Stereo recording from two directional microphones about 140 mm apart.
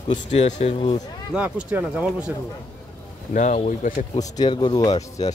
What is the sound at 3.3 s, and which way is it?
Speech, 65° left (ahead or behind).